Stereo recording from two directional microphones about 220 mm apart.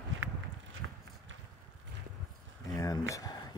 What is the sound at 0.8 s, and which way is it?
Run, 60° right (ahead or behind).